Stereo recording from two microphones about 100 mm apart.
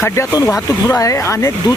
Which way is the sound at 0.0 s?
25° left (ahead or behind).